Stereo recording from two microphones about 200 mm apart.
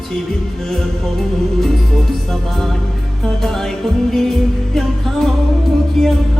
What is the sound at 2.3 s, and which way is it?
Music, centre (ahead or behind).